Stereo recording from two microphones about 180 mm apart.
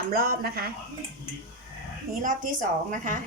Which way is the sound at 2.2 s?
45° right (ahead or behind).